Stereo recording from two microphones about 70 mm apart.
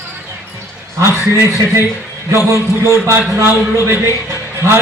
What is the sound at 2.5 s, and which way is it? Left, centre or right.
A man's voice, right.